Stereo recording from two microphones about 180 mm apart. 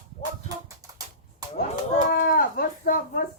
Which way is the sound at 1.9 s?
55° left (ahead or behind).